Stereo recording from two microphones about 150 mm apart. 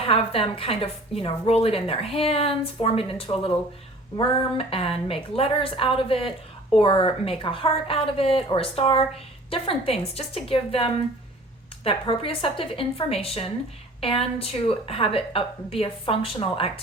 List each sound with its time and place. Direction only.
0.0 s a woman's voice: 40° left (ahead or behind)